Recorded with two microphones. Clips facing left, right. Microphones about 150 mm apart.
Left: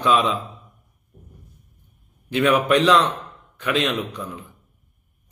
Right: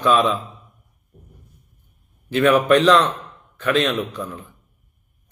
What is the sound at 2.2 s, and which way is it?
A man's voice, 15° left (ahead or behind).